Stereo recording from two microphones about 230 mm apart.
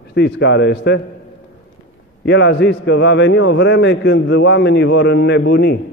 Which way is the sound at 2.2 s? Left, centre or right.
Left.